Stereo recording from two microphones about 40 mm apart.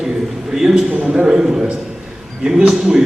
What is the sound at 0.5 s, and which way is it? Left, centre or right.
A man's voice, centre.